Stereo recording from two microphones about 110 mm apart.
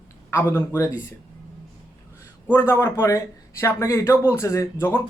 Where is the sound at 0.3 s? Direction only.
25° left (ahead or behind).